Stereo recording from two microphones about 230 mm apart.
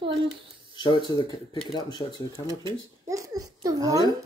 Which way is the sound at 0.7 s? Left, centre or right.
Centre.